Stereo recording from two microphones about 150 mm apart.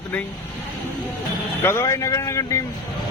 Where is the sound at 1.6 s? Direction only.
15° left (ahead or behind).